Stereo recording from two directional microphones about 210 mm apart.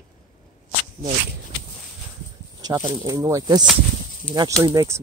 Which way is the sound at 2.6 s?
20° right (ahead or behind).